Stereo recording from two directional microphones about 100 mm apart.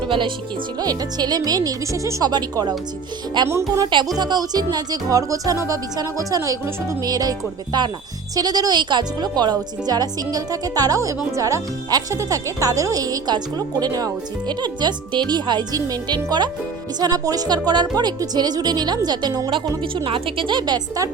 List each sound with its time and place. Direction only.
0.0 s speech: 55° right (ahead or behind)
0.8 s speech: 40° right (ahead or behind)
2.3 s speech: 45° right (ahead or behind)
20.1 s speech: 65° right (ahead or behind); by 21.1 s 40° right (ahead or behind)